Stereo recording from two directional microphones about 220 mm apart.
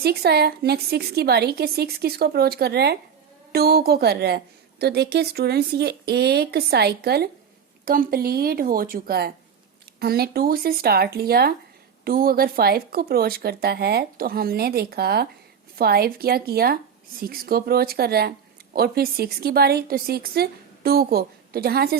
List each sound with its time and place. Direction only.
0.0 s a woman's voice: 45° right (ahead or behind)